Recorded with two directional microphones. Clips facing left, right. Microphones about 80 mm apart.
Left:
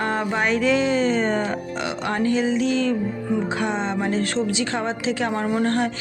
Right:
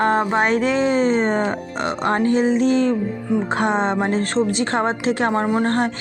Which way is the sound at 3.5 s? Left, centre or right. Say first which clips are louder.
Right 5 dB; right.